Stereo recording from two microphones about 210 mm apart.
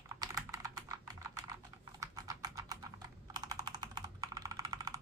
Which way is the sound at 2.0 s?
15° right (ahead or behind).